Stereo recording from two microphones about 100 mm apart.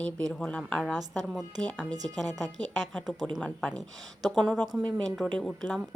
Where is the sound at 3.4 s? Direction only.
10° left (ahead or behind).